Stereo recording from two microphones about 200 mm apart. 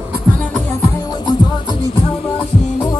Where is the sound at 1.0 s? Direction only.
20° left (ahead or behind).